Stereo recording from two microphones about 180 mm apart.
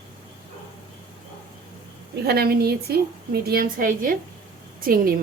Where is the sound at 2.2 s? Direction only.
60° right (ahead or behind).